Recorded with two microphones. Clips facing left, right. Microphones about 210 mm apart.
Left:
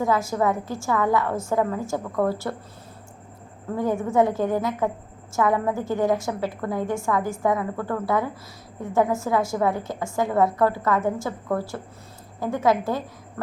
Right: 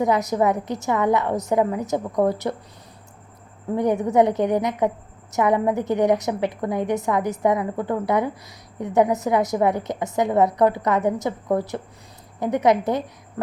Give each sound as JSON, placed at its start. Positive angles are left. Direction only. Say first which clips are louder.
{"t": 0.0, "sound": "a woman's voice", "louder": "right 3 dB", "side_deg": -20}
{"t": 3.8, "sound": "a woman's voice", "louder": "right 3 dB", "side_deg": -20}